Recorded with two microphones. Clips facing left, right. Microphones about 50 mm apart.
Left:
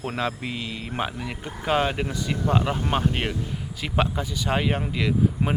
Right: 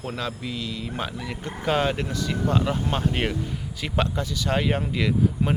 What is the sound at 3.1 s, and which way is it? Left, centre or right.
A man's voice, centre.